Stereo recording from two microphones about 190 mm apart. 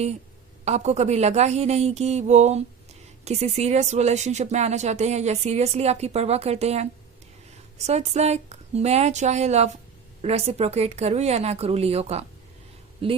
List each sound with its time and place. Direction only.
0.6 s speech: 35° right (ahead or behind)